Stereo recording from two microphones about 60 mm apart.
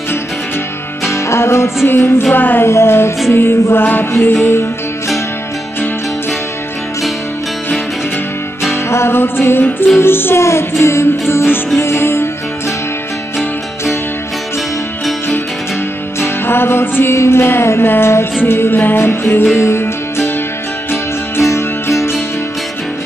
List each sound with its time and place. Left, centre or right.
1.1 s music: left
8.8 s music: left
16.2 s music: left
17.1 s music: left
17.4 s music: left
21.5 s music: left